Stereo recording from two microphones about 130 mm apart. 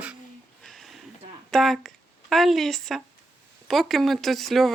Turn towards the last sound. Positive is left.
turn(degrees=0)  # may be behind; listen again after turning